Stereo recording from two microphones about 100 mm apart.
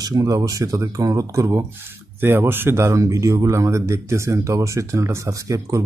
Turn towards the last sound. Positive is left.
turn(degrees=-30)  # may be behind; listen again after turning